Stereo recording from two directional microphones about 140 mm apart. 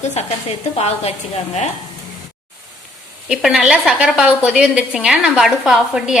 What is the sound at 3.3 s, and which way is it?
A woman's voice, 5° right (ahead or behind).